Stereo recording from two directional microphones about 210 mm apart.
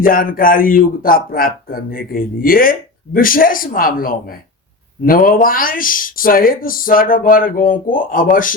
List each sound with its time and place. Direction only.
0.0 s speech: 40° left (ahead or behind)